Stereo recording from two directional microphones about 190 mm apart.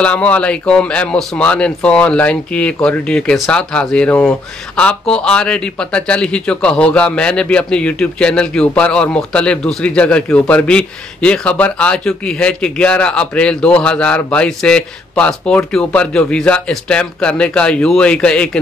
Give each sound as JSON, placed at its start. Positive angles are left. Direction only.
{"t": 0.0, "sound": "speech", "side_deg": 5}